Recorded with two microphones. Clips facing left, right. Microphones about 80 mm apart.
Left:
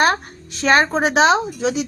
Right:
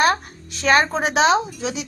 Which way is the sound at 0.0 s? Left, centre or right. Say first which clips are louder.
Left 1 dB; left.